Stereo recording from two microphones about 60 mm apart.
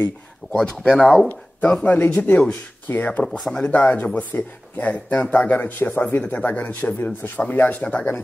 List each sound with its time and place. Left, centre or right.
0.6 s speech: centre
2.0 s speech: left
3.3 s speech: centre
3.5 s speech: left